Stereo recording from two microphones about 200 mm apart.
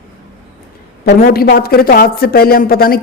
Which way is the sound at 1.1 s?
50° left (ahead or behind).